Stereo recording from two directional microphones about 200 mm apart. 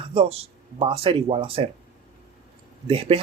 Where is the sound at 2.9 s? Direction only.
30° right (ahead or behind).